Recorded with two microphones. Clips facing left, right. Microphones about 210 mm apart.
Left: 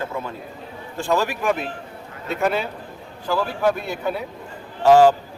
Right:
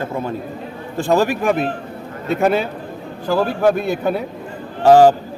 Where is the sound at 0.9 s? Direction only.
35° right (ahead or behind).